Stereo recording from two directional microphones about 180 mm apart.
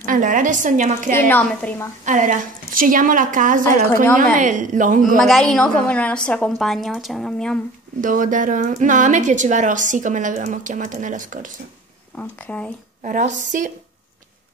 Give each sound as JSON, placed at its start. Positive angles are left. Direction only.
{"t": 0.0, "sound": "a woman's voice", "side_deg": -45}
{"t": 1.1, "sound": "a woman's voice", "side_deg": 10}
{"t": 2.0, "sound": "a woman's voice", "side_deg": -45}
{"t": 4.0, "sound": "a woman's voice", "side_deg": 10}
{"t": 4.4, "sound": "a woman's voice", "side_deg": -45}
{"t": 5.1, "sound": "a woman's voice", "side_deg": 0}
{"t": 8.0, "sound": "a woman's voice", "side_deg": -45}
{"t": 12.2, "sound": "a woman's voice", "side_deg": 10}
{"t": 13.0, "sound": "a woman's voice", "side_deg": -45}